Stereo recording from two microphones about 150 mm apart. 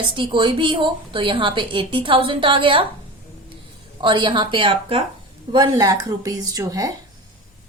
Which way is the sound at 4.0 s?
35° right (ahead or behind).